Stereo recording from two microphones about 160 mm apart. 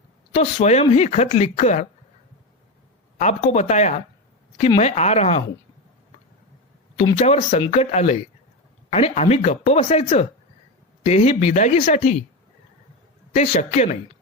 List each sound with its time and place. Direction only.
0.3 s speech: 40° left (ahead or behind)
3.2 s speech: 45° left (ahead or behind)
7.2 s speech: 45° left (ahead or behind)
13.3 s speech: 50° left (ahead or behind)